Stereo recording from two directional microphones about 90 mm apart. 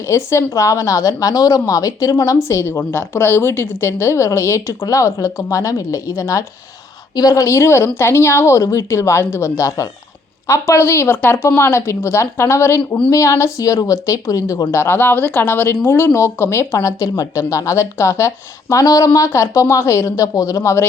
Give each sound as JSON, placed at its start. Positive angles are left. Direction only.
{"t": 0.1, "sound": "a woman's voice", "side_deg": 30}